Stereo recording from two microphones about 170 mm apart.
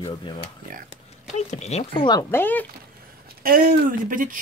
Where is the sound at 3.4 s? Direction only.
55° right (ahead or behind).